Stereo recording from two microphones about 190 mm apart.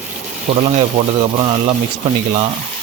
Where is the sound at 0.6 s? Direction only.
30° right (ahead or behind).